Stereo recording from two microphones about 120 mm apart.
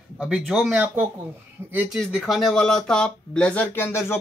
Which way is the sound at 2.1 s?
Centre (ahead or behind).